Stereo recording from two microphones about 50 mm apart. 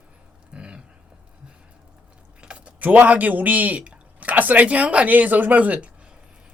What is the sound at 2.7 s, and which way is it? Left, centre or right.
Speech, right.